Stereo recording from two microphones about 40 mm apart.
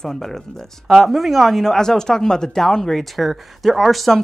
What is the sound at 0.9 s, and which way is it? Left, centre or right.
Speech, centre.